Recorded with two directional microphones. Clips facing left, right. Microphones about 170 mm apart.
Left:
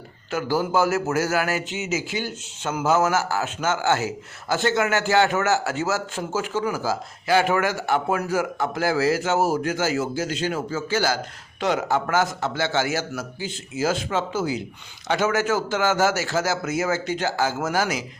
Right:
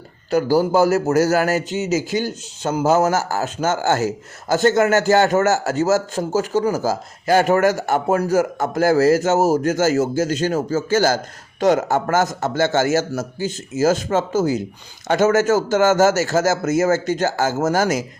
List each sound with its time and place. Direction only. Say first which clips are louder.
0.3 s a man's voice: right 7 dB; 40° right (ahead or behind)